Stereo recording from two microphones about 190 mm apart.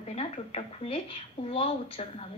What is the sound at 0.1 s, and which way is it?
A woman's voice, 35° left (ahead or behind).